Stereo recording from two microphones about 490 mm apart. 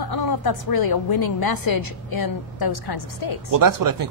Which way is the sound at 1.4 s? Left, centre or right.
Left.